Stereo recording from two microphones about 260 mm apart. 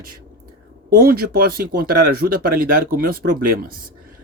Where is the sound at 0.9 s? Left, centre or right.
Right.